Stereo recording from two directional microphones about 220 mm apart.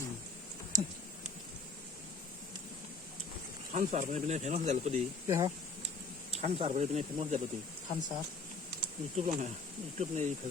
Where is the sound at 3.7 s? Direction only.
35° right (ahead or behind).